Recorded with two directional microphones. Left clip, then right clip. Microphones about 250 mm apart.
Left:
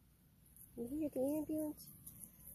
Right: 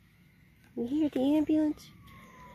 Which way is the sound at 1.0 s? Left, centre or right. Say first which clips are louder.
Right 10 dB; right.